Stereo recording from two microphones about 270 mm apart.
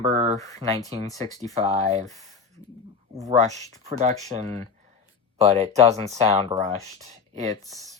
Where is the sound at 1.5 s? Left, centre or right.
Right.